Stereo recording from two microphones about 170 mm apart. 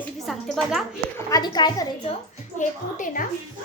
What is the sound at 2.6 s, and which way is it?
Speech, 50° left (ahead or behind).